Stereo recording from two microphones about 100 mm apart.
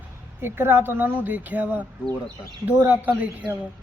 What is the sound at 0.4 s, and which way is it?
Speech, 20° right (ahead or behind).